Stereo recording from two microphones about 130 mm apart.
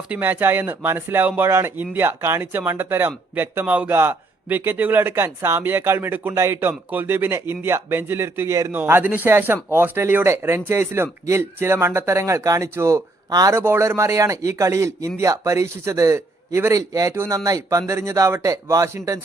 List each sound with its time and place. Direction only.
0.1 s speech: 15° right (ahead or behind)